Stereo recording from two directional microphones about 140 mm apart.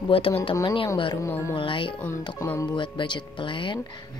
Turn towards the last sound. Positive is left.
turn(degrees=35)  # may be behind; listen again after turning